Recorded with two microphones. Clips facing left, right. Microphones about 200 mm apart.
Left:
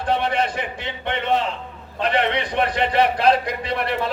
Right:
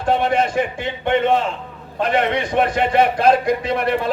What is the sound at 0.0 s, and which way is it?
A man's voice, 45° right (ahead or behind).